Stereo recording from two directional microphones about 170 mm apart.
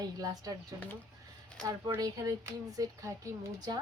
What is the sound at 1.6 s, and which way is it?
A woman's voice, 20° right (ahead or behind).